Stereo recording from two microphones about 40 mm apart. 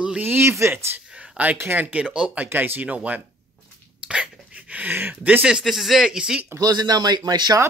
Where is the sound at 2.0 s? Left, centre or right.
Right.